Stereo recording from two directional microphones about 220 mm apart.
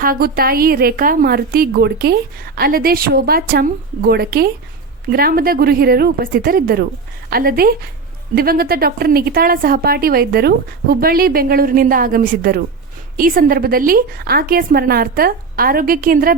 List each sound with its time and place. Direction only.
0.0 s a woman's voice: 40° right (ahead or behind)